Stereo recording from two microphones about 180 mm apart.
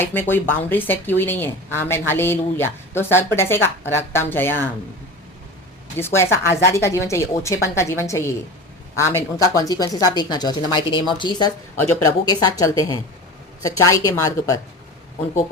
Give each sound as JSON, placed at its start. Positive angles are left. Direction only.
{"t": 0.0, "sound": "a woman's voice", "side_deg": 10}
{"t": 6.0, "sound": "a woman's voice", "side_deg": 15}
{"t": 11.8, "sound": "a woman's voice", "side_deg": 15}